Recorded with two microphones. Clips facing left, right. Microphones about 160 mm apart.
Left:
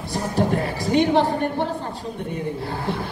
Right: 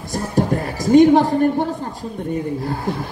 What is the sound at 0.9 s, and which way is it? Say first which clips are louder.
Speech: right 7 dB; 45° right (ahead or behind).